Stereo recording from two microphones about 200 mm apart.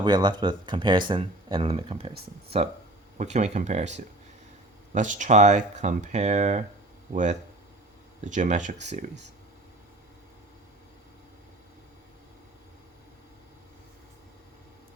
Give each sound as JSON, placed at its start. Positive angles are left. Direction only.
{"t": 0.0, "sound": "speech", "side_deg": -20}
{"t": 3.2, "sound": "speech", "side_deg": -35}